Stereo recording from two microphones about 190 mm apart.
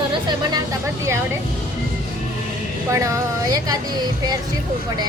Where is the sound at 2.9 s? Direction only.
15° right (ahead or behind).